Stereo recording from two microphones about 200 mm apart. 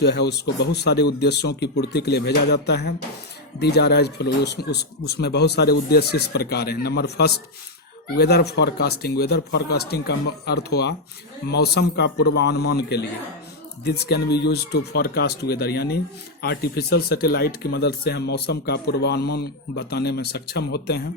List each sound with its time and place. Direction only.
0.0 s speech: 55° left (ahead or behind)